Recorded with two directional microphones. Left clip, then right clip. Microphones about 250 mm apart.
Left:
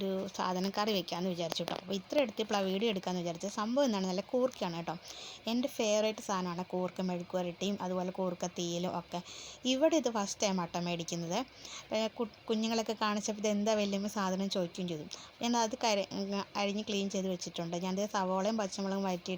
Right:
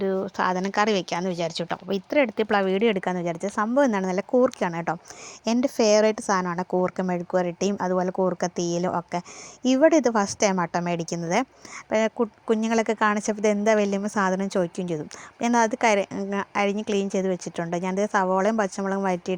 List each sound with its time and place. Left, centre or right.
0.0 s speech: right
16.9 s a woman's voice: right
17.4 s speech: right
18.1 s speech: right